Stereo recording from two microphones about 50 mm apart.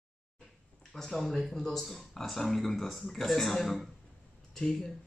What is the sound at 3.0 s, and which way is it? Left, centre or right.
Speech, centre.